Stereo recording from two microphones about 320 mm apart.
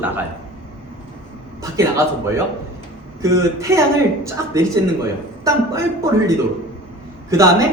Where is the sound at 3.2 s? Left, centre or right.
Centre.